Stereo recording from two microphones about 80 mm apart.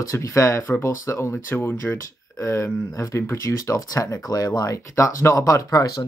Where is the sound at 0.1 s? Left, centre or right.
Left.